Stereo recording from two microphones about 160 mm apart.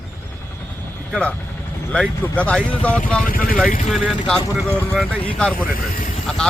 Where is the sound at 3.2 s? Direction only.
60° left (ahead or behind).